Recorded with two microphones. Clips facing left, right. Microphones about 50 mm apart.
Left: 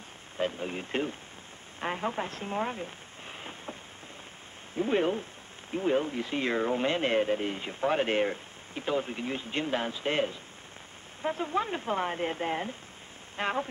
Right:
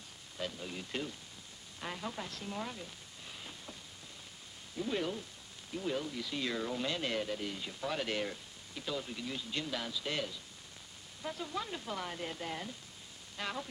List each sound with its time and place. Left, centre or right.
0.4 s speech: left
4.7 s speech: left